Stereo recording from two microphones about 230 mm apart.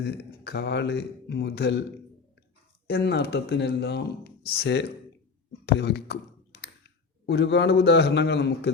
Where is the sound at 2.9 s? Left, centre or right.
Left.